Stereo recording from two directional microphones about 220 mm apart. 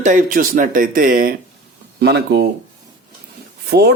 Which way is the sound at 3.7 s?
45° right (ahead or behind).